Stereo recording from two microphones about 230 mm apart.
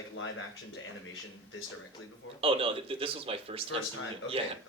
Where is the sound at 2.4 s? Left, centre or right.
Right.